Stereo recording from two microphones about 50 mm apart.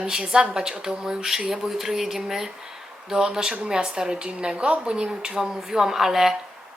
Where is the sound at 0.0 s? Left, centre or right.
Centre.